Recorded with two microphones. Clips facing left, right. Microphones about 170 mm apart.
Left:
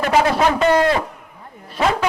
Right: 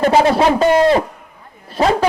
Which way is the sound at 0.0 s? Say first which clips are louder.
Right 4 dB; 30° right (ahead or behind).